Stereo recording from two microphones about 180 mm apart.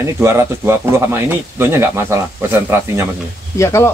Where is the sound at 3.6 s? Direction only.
15° left (ahead or behind).